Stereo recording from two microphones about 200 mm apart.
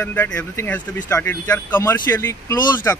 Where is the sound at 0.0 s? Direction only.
10° left (ahead or behind).